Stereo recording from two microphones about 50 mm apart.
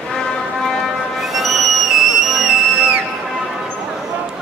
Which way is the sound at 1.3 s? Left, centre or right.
Centre.